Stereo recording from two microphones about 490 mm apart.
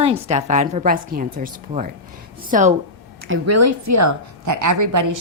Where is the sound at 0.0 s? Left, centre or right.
Centre.